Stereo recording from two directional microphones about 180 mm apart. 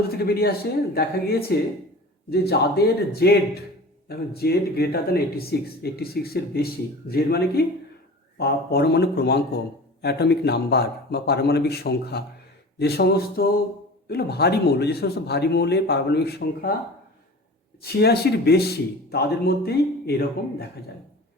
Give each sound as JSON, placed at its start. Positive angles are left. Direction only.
{"t": 0.1, "sound": "speech", "side_deg": 60}
{"t": 17.8, "sound": "speech", "side_deg": 65}